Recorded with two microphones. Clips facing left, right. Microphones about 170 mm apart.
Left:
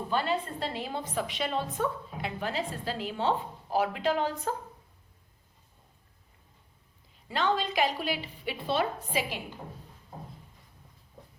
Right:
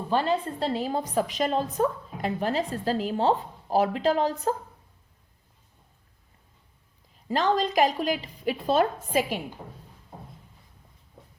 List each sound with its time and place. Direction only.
0.1 s a woman's voice: 40° right (ahead or behind)
7.3 s a woman's voice: 40° right (ahead or behind)